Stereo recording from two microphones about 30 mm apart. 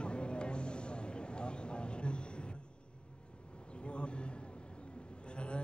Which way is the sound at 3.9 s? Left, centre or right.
Left.